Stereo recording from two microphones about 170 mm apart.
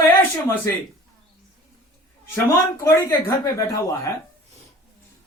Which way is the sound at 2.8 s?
15° left (ahead or behind).